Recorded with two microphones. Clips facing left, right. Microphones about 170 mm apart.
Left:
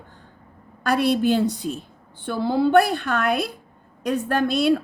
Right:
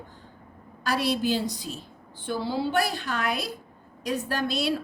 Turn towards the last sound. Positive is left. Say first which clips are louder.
# left 8 dB
turn(degrees=55)  # may be behind; listen again after turning